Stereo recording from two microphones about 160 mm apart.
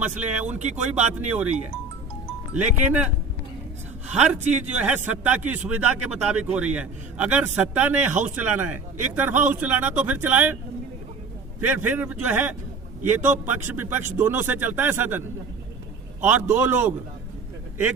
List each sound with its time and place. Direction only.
0.0 s speech: 45° right (ahead or behind)
2.6 s a man's voice: 10° right (ahead or behind)
4.3 s a man's voice: 10° right (ahead or behind)
11.7 s a man's voice: 10° right (ahead or behind)
16.2 s a man's voice: 15° right (ahead or behind)